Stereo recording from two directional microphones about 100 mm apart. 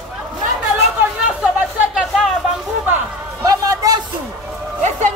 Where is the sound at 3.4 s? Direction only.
35° right (ahead or behind).